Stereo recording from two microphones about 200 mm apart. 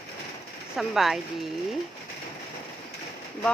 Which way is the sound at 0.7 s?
Centre (ahead or behind).